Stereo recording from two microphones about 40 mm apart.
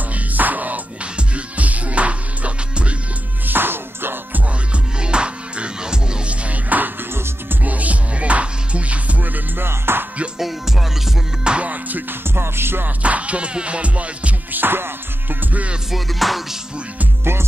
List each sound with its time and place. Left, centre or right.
0.1 s music: right
1.1 s music: right
3.4 s music: right
5.0 s music: right
6.4 s music: right
9.6 s music: right
10.4 s music: centre
11.4 s music: right
11.7 s music: right
12.4 s music: right
13.0 s music: right
14.5 s music: right
15.9 s music: centre
17.2 s music: right